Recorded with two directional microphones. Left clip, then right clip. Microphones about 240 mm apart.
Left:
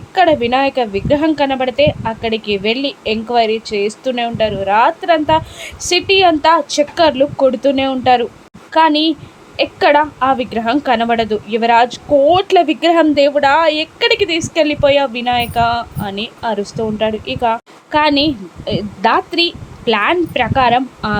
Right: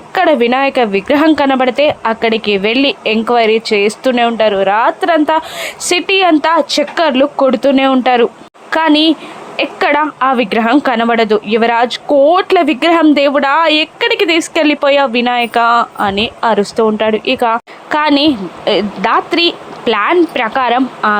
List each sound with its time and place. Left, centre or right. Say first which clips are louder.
0.1 s a woman's voice: right 2 dB; centre